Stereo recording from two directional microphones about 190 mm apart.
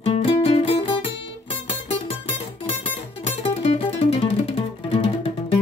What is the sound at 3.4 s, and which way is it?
Music, 30° left (ahead or behind).